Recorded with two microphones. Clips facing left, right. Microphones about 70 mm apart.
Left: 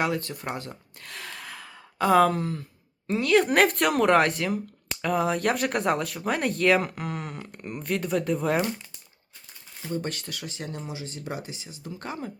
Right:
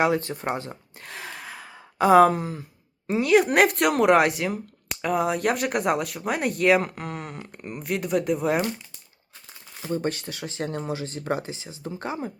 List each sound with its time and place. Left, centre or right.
0.0 s speech: right
0.5 s gasp: right
3.1 s a woman's voice: centre
3.4 s speech: centre
9.9 s speech: right
10.6 s speech: right